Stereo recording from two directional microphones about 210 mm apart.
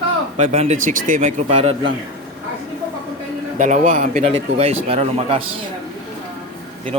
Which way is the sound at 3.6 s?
40° right (ahead or behind).